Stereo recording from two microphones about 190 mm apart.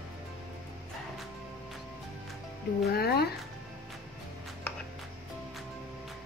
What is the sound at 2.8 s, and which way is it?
Speech, 55° left (ahead or behind).